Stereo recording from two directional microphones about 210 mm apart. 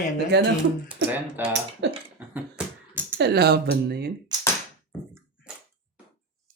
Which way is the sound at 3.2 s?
50° right (ahead or behind).